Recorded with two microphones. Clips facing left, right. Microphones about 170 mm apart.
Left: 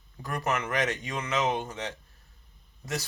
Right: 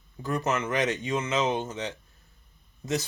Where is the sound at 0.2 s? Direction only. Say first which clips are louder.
Right 3 dB; 20° right (ahead or behind).